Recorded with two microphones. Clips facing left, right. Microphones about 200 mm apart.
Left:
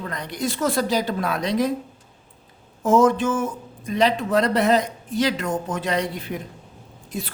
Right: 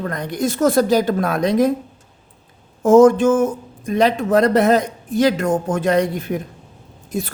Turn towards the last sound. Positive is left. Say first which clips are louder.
# right 6 dB
turn(degrees=-45)  # may be behind; listen again after turning